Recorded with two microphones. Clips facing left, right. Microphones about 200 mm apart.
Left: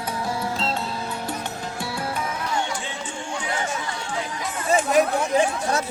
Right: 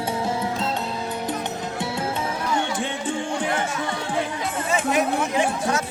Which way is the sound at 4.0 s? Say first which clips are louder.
Right 4 dB; 55° right (ahead or behind).